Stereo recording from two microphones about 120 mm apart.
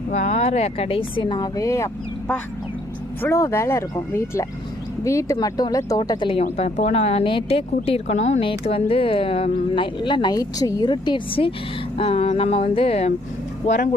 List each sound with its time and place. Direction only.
0.1 s speech: 60° left (ahead or behind); by 1.9 s 25° left (ahead or behind)
3.2 s speech: 20° left (ahead or behind)
6.0 s speech: 40° left (ahead or behind)
6.4 s a sound: 85° left; by 8.4 s 65° left (ahead or behind)
8.4 s speech: 50° left (ahead or behind)
11.9 s a sound: 55° left (ahead or behind)